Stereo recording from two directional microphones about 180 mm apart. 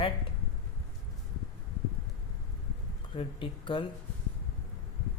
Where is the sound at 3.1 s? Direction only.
25° left (ahead or behind).